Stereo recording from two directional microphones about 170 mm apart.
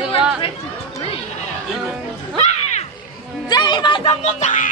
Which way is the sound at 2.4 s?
40° left (ahead or behind).